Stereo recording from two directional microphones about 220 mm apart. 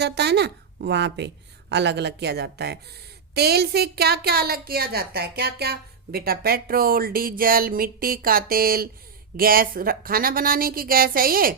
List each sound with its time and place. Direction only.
0.0 s a woman's voice: 50° right (ahead or behind)